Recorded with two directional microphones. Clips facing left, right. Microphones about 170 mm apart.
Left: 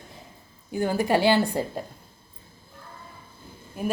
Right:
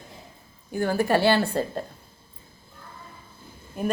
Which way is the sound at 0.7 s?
15° left (ahead or behind).